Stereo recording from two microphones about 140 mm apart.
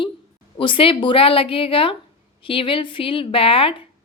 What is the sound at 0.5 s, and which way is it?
Speech, 40° left (ahead or behind).